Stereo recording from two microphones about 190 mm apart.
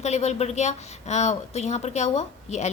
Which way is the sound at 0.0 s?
35° left (ahead or behind).